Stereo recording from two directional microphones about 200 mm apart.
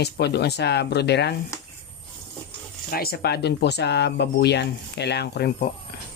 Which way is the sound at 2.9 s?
50° left (ahead or behind).